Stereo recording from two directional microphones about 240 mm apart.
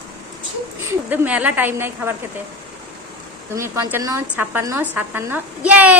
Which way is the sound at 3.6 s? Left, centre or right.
Centre.